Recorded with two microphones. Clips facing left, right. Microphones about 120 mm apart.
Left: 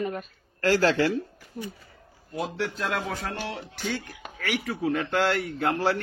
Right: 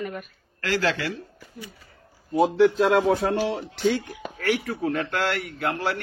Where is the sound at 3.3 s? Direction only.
90° right.